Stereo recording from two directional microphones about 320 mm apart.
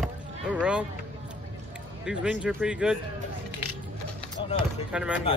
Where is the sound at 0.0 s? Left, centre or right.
Centre.